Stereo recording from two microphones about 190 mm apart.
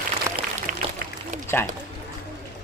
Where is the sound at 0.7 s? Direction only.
45° right (ahead or behind).